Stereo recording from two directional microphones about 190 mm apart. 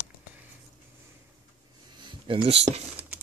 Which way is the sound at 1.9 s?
25° right (ahead or behind).